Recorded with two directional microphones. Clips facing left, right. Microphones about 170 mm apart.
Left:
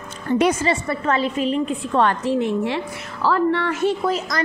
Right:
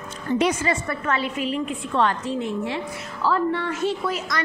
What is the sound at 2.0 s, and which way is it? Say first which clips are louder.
A woman's voice: left 4 dB; 60° left (ahead or behind).